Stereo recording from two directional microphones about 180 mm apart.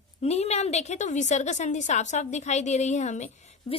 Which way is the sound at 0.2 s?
35° left (ahead or behind).